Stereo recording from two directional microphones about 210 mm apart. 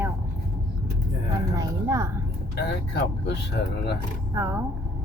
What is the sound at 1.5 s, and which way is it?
Speech, 15° right (ahead or behind).